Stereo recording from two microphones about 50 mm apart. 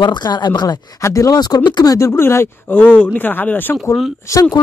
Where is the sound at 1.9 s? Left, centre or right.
Left.